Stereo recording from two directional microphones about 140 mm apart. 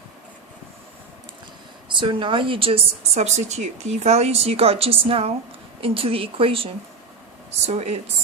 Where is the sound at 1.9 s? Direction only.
35° right (ahead or behind); by 8.0 s 50° right (ahead or behind).